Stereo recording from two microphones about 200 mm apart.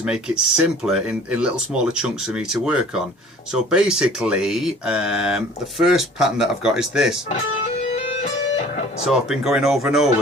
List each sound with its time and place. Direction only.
0.0 s speech: 5° right (ahead or behind)
7.9 s music: 35° left (ahead or behind)
9.0 s speech: centre (ahead or behind)